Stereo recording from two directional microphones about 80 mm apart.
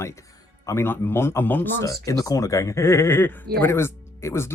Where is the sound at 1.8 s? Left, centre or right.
Left.